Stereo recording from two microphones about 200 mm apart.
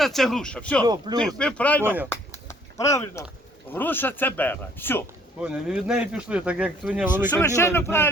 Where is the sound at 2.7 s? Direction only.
15° left (ahead or behind).